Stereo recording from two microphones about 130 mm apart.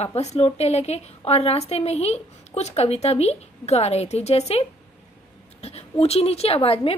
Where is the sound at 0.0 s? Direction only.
55° left (ahead or behind).